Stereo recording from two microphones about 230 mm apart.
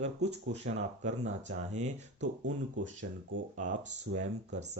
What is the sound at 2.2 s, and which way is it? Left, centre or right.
Speech, right.